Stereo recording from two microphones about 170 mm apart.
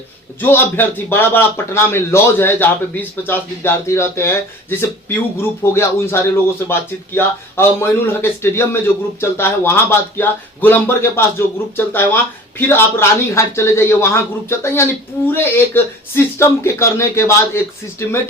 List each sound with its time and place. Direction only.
0.3 s a man's voice: 10° left (ahead or behind)